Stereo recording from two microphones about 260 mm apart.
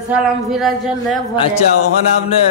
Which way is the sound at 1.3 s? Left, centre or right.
Left.